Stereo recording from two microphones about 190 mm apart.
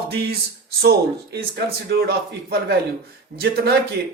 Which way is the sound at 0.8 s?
60° right (ahead or behind).